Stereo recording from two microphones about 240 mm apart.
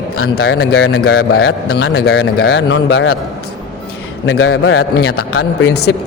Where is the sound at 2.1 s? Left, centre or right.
Left.